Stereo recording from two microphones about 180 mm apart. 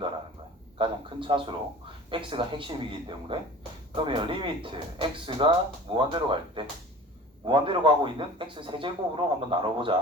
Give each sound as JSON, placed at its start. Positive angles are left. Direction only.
{"t": 0.8, "sound": "a man's voice", "side_deg": -30}